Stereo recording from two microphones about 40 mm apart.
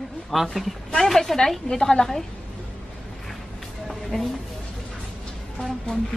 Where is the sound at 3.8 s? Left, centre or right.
Centre.